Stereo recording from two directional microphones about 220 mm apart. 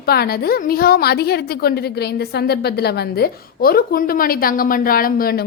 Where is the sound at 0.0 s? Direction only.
45° left (ahead or behind).